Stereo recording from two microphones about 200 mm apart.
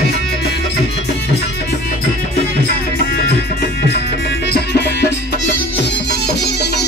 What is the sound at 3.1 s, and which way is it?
Music, 55° left (ahead or behind).